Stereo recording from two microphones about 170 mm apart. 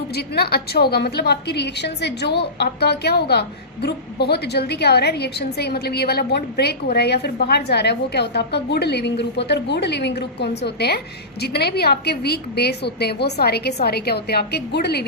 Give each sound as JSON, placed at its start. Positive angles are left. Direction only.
{"t": 0.1, "sound": "a woman's voice", "side_deg": 70}